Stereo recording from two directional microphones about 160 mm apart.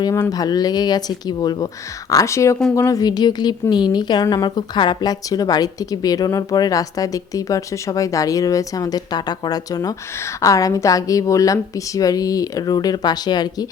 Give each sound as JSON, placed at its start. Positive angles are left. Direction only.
{"t": 0.0, "sound": "a woman's voice", "side_deg": 20}